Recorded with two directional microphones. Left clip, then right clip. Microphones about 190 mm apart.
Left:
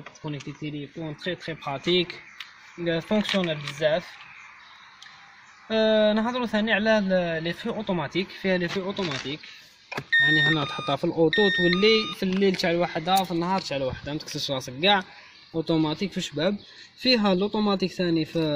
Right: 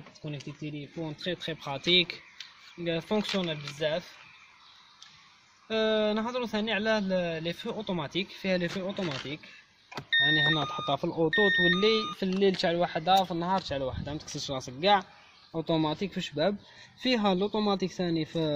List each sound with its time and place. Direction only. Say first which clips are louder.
0.4 s speech: left 4 dB; centre (ahead or behind)
0.7 s a man's voice: left 3 dB; 35° right (ahead or behind); by 4.1 s 15° right (ahead or behind)
5.7 s a man's voice: left 6 dB; 15° right (ahead or behind)
8.4 s speech: left 4 dB; 35° right (ahead or behind)
9.9 s speech: left 5 dB; centre (ahead or behind)
15.7 s a man's voice: left 3 dB; 15° right (ahead or behind)